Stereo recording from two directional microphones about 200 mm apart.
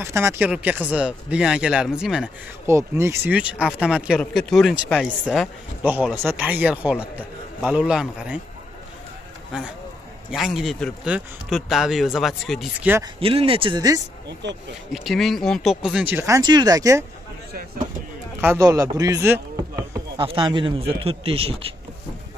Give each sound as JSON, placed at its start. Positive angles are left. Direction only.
{"t": 0.0, "sound": "speech", "side_deg": -15}
{"t": 10.3, "sound": "speech", "side_deg": 0}
{"t": 13.2, "sound": "a man's voice", "side_deg": -30}
{"t": 14.4, "sound": "speech", "side_deg": -60}
{"t": 14.9, "sound": "speech", "side_deg": 0}
{"t": 18.4, "sound": "a man's voice", "side_deg": -15}